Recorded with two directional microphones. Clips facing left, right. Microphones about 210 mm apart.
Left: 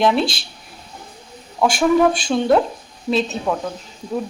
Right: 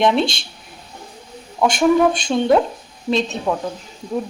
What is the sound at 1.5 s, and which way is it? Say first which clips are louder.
A woman's voice: right 1 dB; centre (ahead or behind).